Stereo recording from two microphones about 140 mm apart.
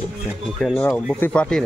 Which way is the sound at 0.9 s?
Centre (ahead or behind).